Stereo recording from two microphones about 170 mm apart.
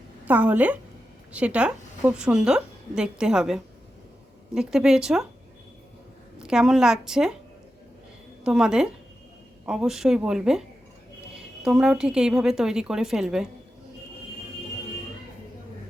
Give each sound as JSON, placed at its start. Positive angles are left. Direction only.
{"t": 0.3, "sound": "a woman's voice", "side_deg": -10}
{"t": 6.4, "sound": "a woman's voice", "side_deg": -5}
{"t": 8.4, "sound": "a woman's voice", "side_deg": -5}
{"t": 11.6, "sound": "a woman's voice", "side_deg": -5}